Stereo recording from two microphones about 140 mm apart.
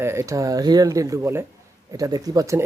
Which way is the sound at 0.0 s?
20° right (ahead or behind).